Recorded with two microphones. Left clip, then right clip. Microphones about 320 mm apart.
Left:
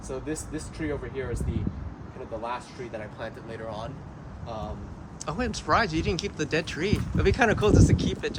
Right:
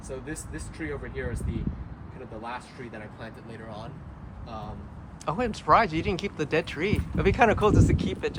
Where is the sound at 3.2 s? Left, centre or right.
Centre.